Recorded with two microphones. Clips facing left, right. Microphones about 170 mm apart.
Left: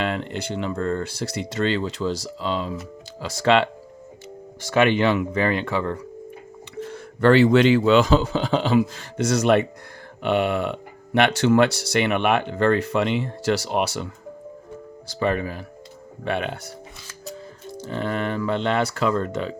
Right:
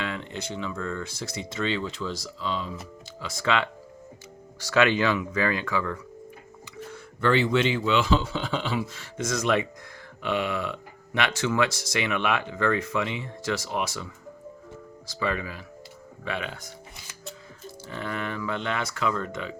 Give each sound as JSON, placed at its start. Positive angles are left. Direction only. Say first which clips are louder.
{"t": 0.0, "sound": "speech", "louder": "left 7 dB", "side_deg": 65}
{"t": 0.7, "sound": "speech", "louder": "left 10 dB", "side_deg": 35}
{"t": 1.1, "sound": "speech", "louder": "left 6 dB", "side_deg": 65}
{"t": 1.5, "sound": "speech", "louder": "left 5 dB", "side_deg": 35}
{"t": 4.6, "sound": "speech", "louder": "left 4 dB", "side_deg": 25}
{"t": 7.2, "sound": "speech", "louder": "left 8 dB", "side_deg": 70}
{"t": 7.8, "sound": "speech", "louder": "left 7 dB", "side_deg": 40}
{"t": 9.1, "sound": "speech", "louder": "left 7 dB", "side_deg": 70}
{"t": 15.2, "sound": "speech", "louder": "left 6 dB", "side_deg": 50}
{"t": 16.2, "sound": "speech", "louder": "left 7 dB", "side_deg": 60}
{"t": 17.9, "sound": "speech", "louder": "left 7 dB", "side_deg": 30}